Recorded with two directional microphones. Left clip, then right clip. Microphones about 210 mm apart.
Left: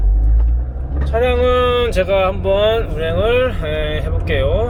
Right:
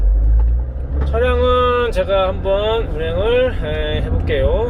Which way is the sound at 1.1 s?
25° left (ahead or behind).